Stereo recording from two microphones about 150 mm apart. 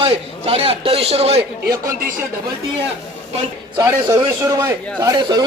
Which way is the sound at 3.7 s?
25° right (ahead or behind).